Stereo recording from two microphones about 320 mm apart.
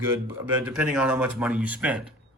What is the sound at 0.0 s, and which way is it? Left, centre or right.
A man's voice, centre.